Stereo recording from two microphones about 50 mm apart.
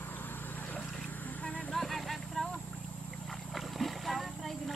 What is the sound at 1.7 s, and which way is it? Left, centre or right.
Vehicle, centre.